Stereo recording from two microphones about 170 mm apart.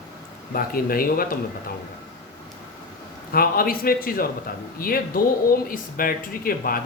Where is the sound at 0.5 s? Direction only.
60° left (ahead or behind).